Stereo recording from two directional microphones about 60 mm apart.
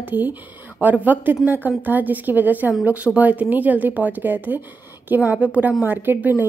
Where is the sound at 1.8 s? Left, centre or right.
Right.